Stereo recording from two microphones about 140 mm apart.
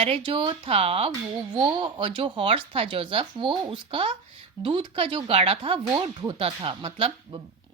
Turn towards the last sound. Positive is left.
turn(degrees=-40)  # may be behind; listen again after turning